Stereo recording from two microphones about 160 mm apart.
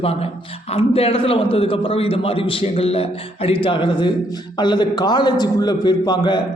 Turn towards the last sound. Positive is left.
turn(degrees=25)  # may be behind; listen again after turning